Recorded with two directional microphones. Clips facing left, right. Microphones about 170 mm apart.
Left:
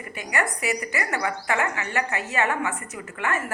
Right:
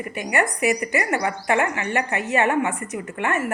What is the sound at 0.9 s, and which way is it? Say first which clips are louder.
A woman's voice: right 4 dB; 20° right (ahead or behind).